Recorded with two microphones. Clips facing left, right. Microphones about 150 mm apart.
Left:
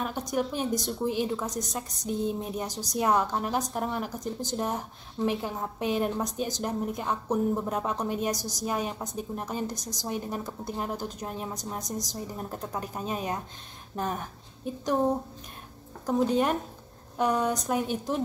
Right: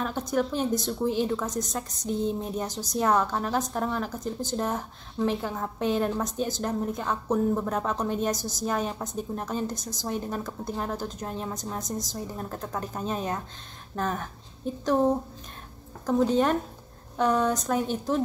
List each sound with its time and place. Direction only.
0.0 s a woman's voice: 15° left (ahead or behind)
16.1 s a woman's voice: 10° left (ahead or behind)